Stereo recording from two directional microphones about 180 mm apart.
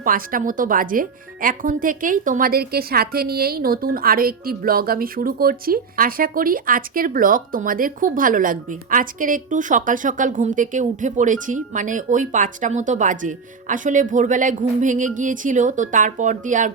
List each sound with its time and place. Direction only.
0.0 s speech: 50° right (ahead or behind)